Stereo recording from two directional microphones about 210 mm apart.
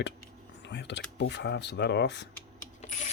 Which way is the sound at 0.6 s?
55° left (ahead or behind).